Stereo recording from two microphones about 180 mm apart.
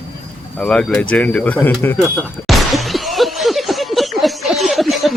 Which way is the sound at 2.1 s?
Centre (ahead or behind).